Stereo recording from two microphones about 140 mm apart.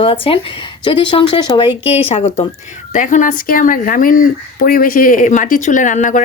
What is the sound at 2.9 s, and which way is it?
Speech, 65° left (ahead or behind).